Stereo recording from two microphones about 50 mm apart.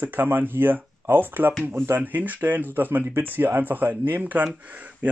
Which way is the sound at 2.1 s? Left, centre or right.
Right.